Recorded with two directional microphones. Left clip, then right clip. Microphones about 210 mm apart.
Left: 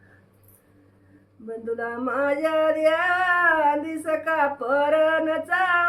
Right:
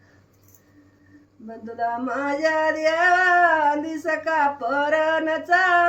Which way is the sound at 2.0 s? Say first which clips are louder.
Left 3 dB; 20° left (ahead or behind).